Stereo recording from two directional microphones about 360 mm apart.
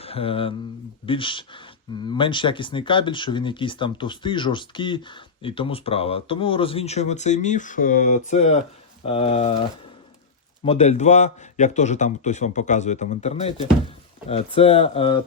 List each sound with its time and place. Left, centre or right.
0.0 s speech: centre
10.6 s a man's voice: centre